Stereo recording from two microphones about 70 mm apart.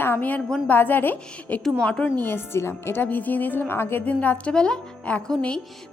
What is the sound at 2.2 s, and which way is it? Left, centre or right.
A woman's voice, left.